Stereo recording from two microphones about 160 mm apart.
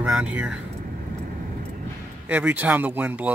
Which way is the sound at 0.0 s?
10° right (ahead or behind).